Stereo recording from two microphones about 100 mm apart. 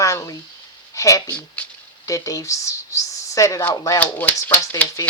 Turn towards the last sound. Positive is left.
turn(degrees=15)  # may be behind; listen again after turning